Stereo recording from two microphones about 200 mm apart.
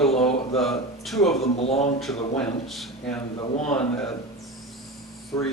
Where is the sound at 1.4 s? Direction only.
30° left (ahead or behind).